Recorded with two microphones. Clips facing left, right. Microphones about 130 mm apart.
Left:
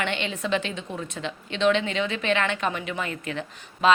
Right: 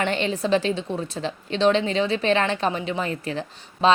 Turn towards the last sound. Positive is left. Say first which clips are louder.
# right 1 dB
turn(degrees=-30)  # may be behind; listen again after turning